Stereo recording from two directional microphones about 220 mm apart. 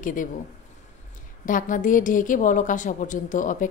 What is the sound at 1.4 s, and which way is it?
A woman's voice, 35° left (ahead or behind).